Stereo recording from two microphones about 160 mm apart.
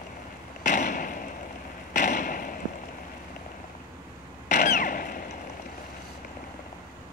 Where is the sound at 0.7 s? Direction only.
55° left (ahead or behind).